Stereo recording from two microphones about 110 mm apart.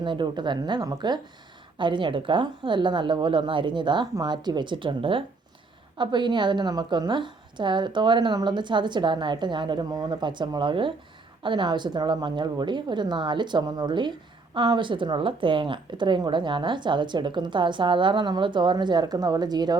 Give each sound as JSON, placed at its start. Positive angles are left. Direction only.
{"t": 0.0, "sound": "a woman's voice", "side_deg": -45}